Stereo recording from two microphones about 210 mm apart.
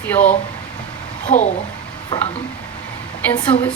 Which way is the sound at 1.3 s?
35° left (ahead or behind).